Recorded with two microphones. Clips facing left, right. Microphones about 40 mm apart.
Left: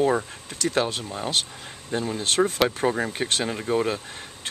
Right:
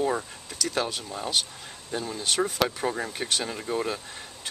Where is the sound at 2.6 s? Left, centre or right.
Left.